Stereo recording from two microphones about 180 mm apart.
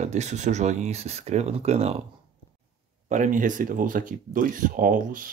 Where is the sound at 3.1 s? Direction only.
45° right (ahead or behind).